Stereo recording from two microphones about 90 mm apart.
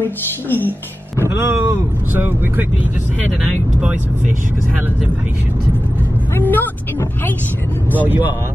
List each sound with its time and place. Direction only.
0.0 s a woman's voice: 20° left (ahead or behind)
1.2 s speech: 30° right (ahead or behind)
2.1 s speech: 20° right (ahead or behind)
6.3 s a woman's voice: 20° left (ahead or behind)